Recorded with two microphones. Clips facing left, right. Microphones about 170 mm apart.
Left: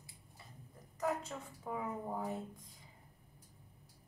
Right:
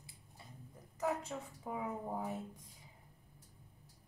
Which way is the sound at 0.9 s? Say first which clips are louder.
Even; 5° right (ahead or behind).